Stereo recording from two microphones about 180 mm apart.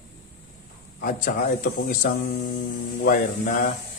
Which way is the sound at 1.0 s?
50° left (ahead or behind).